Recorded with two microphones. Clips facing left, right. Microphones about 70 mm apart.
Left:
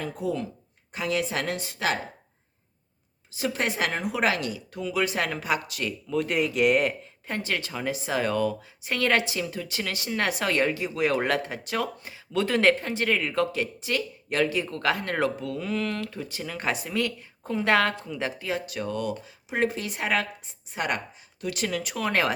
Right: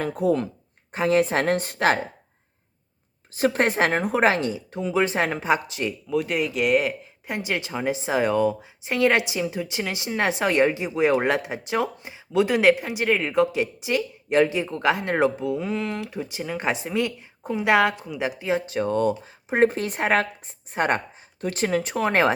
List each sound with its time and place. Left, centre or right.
0.0 s a woman's voice: right
0.9 s a woman's voice: right
3.3 s a woman's voice: right
6.1 s speech: centre
7.3 s a woman's voice: centre